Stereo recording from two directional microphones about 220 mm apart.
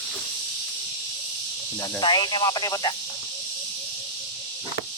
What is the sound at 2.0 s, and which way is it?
Speech, 20° left (ahead or behind).